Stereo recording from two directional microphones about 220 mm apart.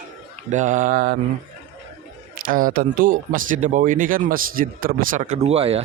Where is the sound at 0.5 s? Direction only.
35° right (ahead or behind).